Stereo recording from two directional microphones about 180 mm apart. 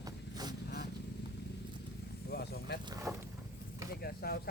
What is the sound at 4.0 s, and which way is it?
Vehicle, 60° left (ahead or behind).